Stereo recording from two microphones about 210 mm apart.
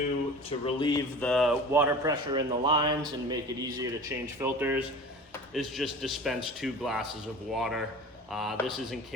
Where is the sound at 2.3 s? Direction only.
20° right (ahead or behind).